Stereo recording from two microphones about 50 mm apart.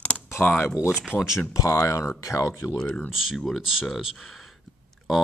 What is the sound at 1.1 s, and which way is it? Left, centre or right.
Speech, left.